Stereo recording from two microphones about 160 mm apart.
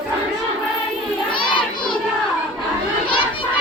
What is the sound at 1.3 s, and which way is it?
Crowd, 30° left (ahead or behind).